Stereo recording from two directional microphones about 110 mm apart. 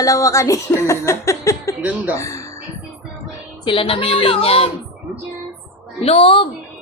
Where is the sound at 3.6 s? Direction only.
55° left (ahead or behind).